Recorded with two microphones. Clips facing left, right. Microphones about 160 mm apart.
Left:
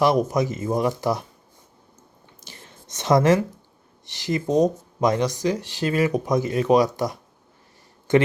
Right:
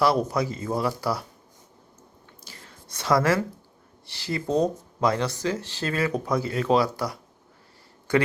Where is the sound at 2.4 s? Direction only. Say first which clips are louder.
Left 2 dB; 20° left (ahead or behind).